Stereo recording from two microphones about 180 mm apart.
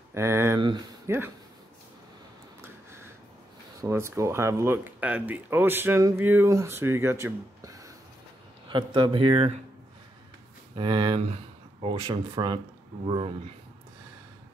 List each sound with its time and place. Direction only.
0.1 s speech: 15° right (ahead or behind)
3.8 s speech: 15° right (ahead or behind); by 9.6 s 30° right (ahead or behind)
10.8 s speech: 25° right (ahead or behind)